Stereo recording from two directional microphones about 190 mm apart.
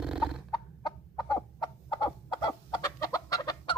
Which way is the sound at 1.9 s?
20° left (ahead or behind).